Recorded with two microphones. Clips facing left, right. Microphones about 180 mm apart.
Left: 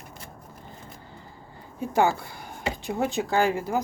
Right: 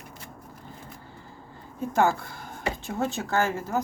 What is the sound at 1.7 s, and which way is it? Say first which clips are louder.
Speech: left 1 dB; 10° left (ahead or behind).